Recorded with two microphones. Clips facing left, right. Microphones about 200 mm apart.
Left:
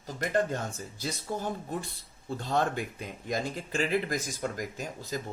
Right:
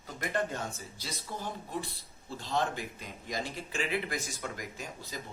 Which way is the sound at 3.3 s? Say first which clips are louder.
Left 5 dB; 50° left (ahead or behind).